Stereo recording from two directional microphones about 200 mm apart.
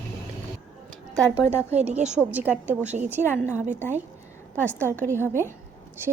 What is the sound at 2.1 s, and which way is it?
Speech, 10° right (ahead or behind).